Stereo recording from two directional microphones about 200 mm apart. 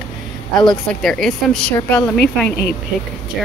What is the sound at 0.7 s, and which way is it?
A woman's voice, centre (ahead or behind).